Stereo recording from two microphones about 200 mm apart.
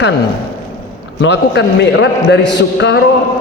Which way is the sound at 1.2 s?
60° left (ahead or behind).